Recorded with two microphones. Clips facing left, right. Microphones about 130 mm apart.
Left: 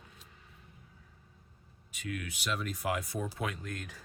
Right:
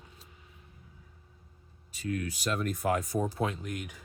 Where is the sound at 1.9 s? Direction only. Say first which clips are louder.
Right 6 dB; 35° right (ahead or behind).